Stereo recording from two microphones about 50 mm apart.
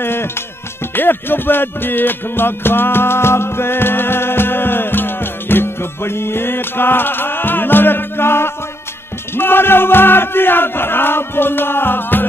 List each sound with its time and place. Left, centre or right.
0.0 s music: left